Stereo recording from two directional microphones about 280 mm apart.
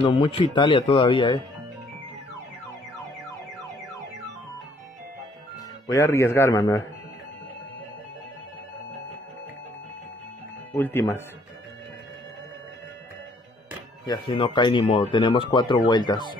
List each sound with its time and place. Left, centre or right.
0.1 s speech: centre
5.9 s speech: centre
10.8 s speech: centre
14.0 s speech: centre